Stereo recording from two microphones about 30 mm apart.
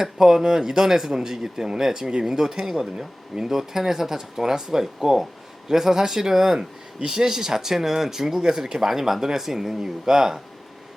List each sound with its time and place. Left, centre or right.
0.0 s speech: centre